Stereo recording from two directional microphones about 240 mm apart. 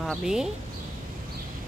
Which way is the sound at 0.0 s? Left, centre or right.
Centre.